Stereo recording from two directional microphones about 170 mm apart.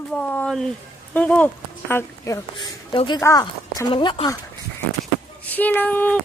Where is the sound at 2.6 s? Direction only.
30° left (ahead or behind).